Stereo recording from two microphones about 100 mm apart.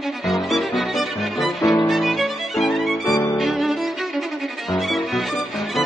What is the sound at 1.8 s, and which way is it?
Music, centre (ahead or behind).